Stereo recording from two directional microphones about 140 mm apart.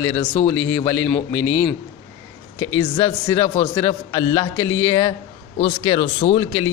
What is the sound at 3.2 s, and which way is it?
A man's voice, 20° left (ahead or behind).